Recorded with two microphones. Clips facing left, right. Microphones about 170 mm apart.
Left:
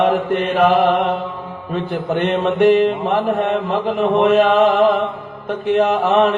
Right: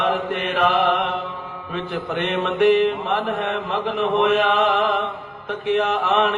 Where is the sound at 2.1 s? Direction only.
35° left (ahead or behind).